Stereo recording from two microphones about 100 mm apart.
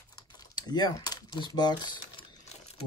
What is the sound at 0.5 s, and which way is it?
Speech, 40° left (ahead or behind).